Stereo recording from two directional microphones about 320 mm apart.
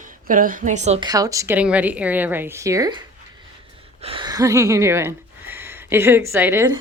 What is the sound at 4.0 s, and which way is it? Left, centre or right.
Speech, centre.